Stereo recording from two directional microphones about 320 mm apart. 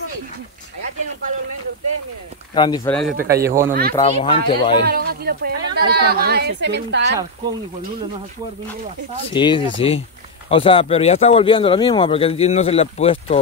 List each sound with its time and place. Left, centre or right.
2.5 s speech: centre
3.2 s speech: right
3.4 s speech: centre
3.9 s speech: centre
4.8 s speech: right
9.3 s speech: centre